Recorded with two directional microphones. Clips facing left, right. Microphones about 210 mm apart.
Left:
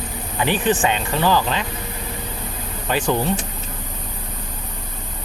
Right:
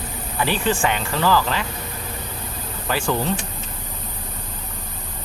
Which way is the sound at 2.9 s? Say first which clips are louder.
Left 2 dB; 20° left (ahead or behind).